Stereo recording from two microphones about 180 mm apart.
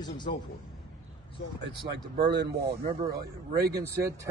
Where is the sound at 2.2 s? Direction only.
70° right (ahead or behind).